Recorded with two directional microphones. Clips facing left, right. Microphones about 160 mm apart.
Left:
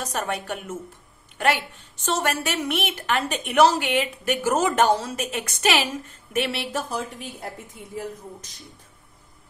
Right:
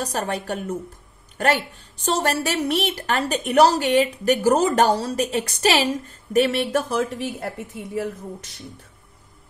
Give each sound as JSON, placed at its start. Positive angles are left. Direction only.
{"t": 0.0, "sound": "a woman's voice", "side_deg": -35}
{"t": 6.7, "sound": "speech", "side_deg": -75}